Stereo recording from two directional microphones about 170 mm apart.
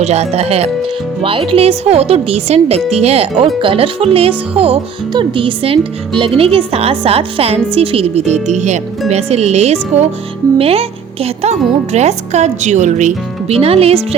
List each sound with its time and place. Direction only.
0.0 s speech: 40° right (ahead or behind)